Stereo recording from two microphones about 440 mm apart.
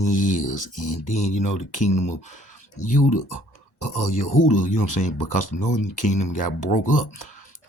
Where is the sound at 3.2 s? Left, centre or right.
Left.